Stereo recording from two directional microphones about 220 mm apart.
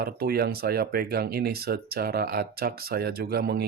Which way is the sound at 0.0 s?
45° right (ahead or behind).